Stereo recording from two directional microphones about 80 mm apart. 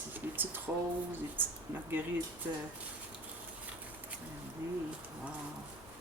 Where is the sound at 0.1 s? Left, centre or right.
Right.